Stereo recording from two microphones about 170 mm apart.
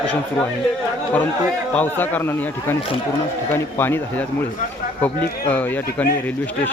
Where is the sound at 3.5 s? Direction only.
15° left (ahead or behind).